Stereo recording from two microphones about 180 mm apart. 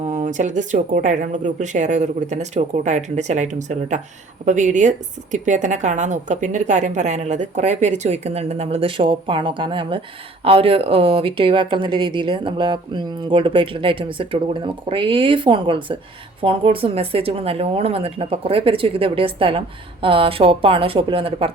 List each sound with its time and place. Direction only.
0.0 s a woman's voice: 40° right (ahead or behind)